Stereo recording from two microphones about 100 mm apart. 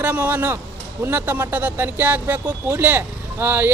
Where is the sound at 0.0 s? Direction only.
15° right (ahead or behind).